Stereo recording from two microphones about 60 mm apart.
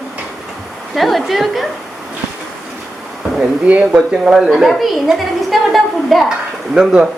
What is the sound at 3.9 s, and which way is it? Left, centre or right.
A woman's voice, centre.